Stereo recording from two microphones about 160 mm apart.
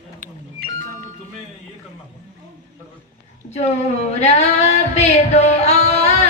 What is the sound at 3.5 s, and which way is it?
Female singing, 45° left (ahead or behind).